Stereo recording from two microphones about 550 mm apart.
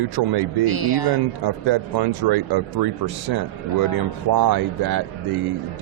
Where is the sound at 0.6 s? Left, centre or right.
Left.